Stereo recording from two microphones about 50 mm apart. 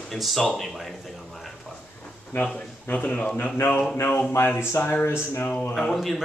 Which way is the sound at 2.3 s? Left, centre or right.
Left.